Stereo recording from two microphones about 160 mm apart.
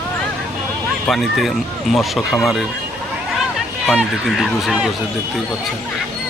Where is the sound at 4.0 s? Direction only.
Centre (ahead or behind).